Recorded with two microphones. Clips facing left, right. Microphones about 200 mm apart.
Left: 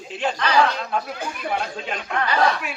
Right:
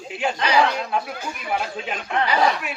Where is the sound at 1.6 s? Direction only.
5° right (ahead or behind).